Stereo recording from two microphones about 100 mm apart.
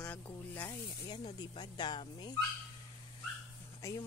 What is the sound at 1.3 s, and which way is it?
Speech, 45° left (ahead or behind).